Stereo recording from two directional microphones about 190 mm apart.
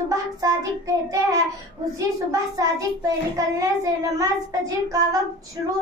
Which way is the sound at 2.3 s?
20° right (ahead or behind).